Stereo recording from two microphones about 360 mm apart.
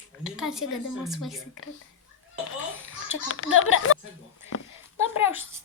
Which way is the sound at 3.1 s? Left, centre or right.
Left.